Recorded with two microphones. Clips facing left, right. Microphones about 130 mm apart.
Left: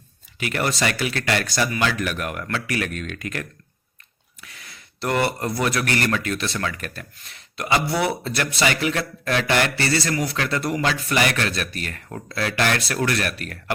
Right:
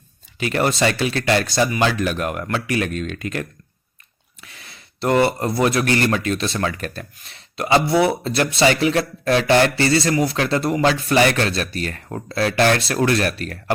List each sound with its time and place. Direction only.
0.3 s speech: 30° right (ahead or behind)